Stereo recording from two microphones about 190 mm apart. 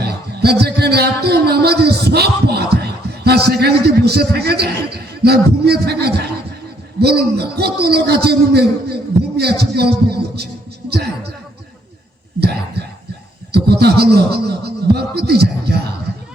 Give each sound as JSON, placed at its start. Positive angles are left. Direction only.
{"t": 0.0, "sound": "a man's voice", "side_deg": -60}
{"t": 13.5, "sound": "a sound", "side_deg": -60}
{"t": 14.0, "sound": "speech", "side_deg": -55}